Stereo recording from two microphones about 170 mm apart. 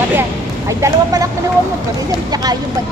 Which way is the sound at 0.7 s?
20° right (ahead or behind).